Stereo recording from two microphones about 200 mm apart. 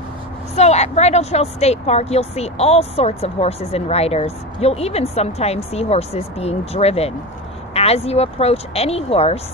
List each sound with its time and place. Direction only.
0.6 s speech: 35° left (ahead or behind)